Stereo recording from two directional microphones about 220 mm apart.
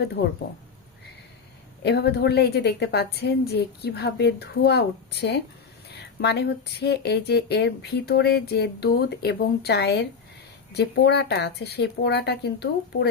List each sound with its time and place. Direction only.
0.2 s speech: 50° left (ahead or behind)
1.8 s speech: 50° left (ahead or behind)